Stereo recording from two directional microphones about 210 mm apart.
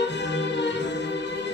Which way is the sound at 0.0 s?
55° left (ahead or behind).